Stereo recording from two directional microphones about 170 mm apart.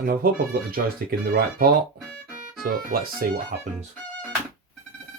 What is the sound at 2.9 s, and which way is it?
Speech, 60° right (ahead or behind).